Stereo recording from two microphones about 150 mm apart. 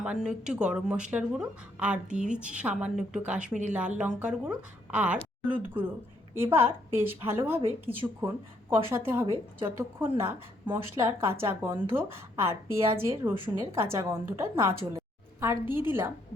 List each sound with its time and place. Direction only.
0.0 s a woman's voice: 5° right (ahead or behind)
14.9 s a sound: 15° right (ahead or behind)
15.9 s a woman's voice: 15° right (ahead or behind)